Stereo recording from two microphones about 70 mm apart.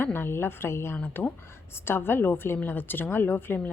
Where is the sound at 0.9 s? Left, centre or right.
Left.